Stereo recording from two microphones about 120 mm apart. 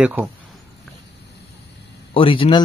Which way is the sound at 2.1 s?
45° left (ahead or behind).